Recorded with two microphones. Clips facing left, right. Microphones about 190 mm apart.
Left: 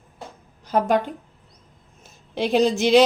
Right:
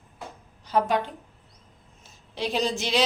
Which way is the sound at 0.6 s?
45° left (ahead or behind).